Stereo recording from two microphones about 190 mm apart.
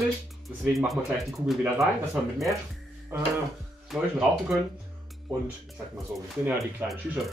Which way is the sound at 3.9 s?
Centre (ahead or behind).